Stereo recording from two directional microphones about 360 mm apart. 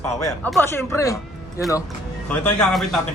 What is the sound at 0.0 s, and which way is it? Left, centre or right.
A man's voice, centre.